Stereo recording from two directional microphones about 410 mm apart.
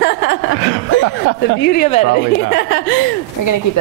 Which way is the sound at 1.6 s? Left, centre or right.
Left.